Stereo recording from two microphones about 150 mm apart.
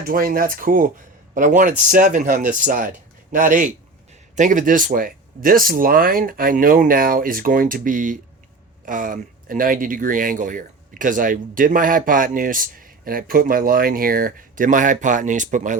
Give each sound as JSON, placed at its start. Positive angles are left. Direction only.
{"t": 0.0, "sound": "speech", "side_deg": -70}